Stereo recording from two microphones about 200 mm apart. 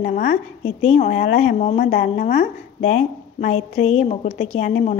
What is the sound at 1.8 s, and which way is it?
Speech, 50° left (ahead or behind).